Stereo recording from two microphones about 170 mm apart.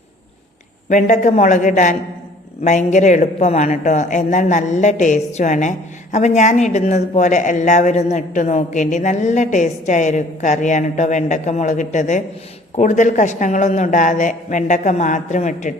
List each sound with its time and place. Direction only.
0.9 s speech: 45° left (ahead or behind)